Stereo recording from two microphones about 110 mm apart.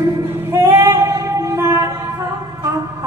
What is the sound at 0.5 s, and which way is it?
Female singing, 25° right (ahead or behind).